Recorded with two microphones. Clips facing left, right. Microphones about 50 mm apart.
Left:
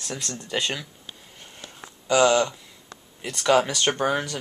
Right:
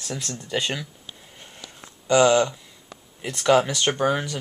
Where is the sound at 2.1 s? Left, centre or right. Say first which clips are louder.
Right 2 dB; centre.